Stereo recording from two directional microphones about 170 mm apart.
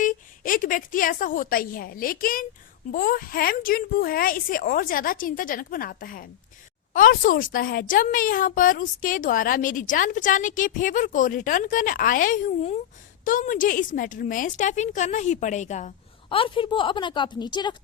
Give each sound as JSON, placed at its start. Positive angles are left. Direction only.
{"t": 0.0, "sound": "a woman's voice", "side_deg": 50}
{"t": 16.3, "sound": "a woman's voice", "side_deg": 30}